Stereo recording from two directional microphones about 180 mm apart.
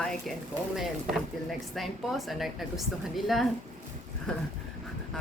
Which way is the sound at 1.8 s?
Centre (ahead or behind).